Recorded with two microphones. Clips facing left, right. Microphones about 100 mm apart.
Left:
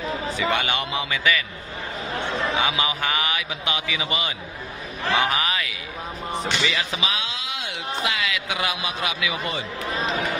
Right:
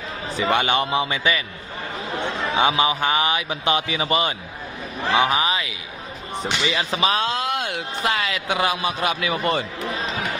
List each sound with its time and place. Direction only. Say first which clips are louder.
0.4 s a man's voice: right 6 dB; 30° right (ahead or behind)
2.6 s a man's voice: right 5 dB; 30° right (ahead or behind)
5.1 s a man's voice: right 3 dB; 20° right (ahead or behind); by 9.7 s 50° right (ahead or behind)